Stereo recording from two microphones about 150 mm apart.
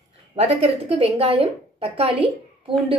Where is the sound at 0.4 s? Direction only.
40° right (ahead or behind).